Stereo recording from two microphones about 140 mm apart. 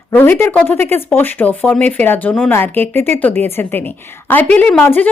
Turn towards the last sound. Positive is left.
turn(degrees=10)  # may be behind; listen again after turning